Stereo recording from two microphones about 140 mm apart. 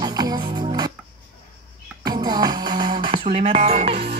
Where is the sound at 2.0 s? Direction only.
30° right (ahead or behind).